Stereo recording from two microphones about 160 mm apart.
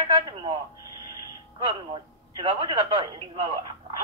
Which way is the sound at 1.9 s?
30° right (ahead or behind).